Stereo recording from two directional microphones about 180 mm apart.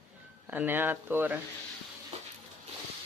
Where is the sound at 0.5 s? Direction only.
10° right (ahead or behind).